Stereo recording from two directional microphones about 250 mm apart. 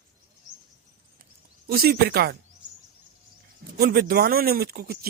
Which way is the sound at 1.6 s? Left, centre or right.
Right.